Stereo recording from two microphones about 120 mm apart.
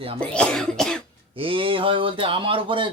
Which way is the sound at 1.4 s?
50° right (ahead or behind).